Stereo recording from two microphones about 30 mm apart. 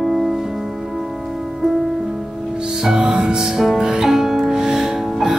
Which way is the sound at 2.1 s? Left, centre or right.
Right.